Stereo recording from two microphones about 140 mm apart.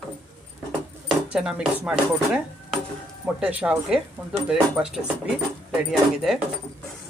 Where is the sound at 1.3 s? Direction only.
5° right (ahead or behind).